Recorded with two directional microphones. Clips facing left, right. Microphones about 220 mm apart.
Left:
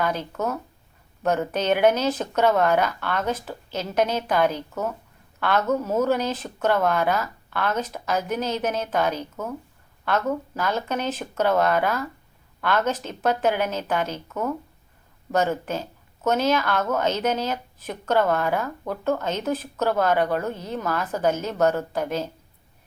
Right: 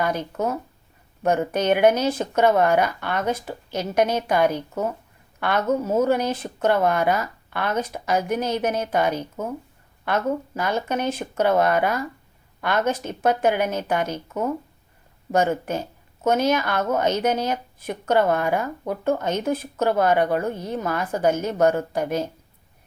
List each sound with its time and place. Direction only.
0.0 s speech: 10° right (ahead or behind)
4.7 s speech: 30° right (ahead or behind)
5.4 s a woman's voice: 15° right (ahead or behind)
10.5 s speech: 10° right (ahead or behind)